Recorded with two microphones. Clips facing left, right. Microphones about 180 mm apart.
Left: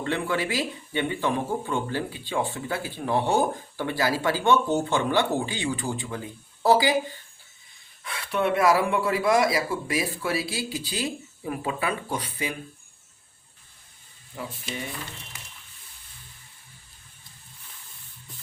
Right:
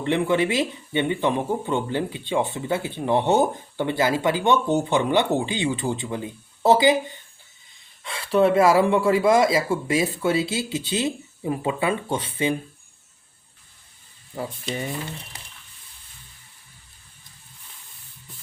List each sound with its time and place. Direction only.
0.0 s speech: 20° right (ahead or behind)
8.0 s speech: 25° right (ahead or behind)